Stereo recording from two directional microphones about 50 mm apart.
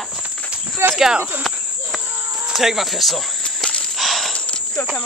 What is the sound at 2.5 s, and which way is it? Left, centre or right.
Speech, centre.